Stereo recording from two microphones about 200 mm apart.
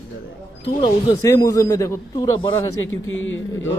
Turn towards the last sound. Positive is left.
turn(degrees=75)  # may be behind; listen again after turning